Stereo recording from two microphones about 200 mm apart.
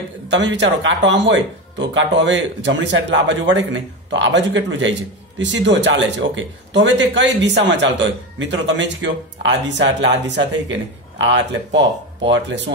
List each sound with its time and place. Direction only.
0.3 s speech: 65° right (ahead or behind)